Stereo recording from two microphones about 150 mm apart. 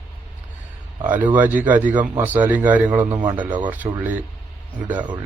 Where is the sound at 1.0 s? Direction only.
10° right (ahead or behind).